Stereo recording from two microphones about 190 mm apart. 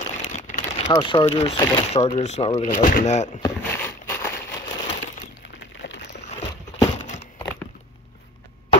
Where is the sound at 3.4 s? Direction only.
10° left (ahead or behind).